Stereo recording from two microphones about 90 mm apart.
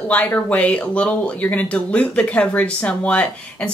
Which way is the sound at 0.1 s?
15° left (ahead or behind).